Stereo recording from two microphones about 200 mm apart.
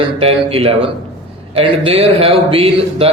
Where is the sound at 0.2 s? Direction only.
30° right (ahead or behind).